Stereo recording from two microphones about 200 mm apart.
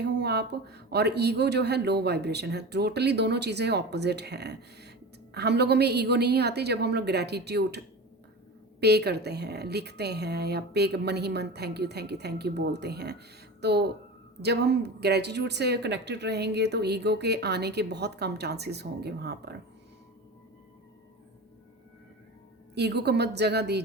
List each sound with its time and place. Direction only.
0.0 s speech: 55° right (ahead or behind)
8.8 s speech: 55° right (ahead or behind)
22.7 s speech: 55° right (ahead or behind)